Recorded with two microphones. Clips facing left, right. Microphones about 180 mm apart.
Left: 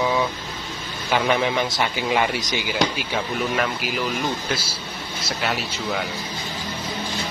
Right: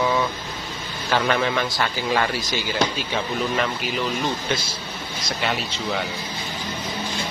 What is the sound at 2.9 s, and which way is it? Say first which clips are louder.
Speech: even; 5° left (ahead or behind).